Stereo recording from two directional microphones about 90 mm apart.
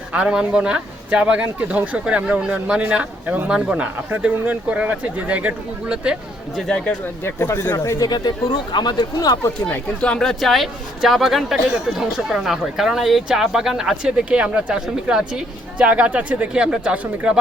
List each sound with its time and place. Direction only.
0.1 s speech: 10° right (ahead or behind)
7.3 s speech: 30° left (ahead or behind)
8.0 s speech: 50° left (ahead or behind)
9.6 s speech: 15° left (ahead or behind); by 17.3 s 15° right (ahead or behind)